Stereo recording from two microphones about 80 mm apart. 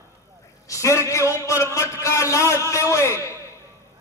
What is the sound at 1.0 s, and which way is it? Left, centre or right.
A man's voice, left.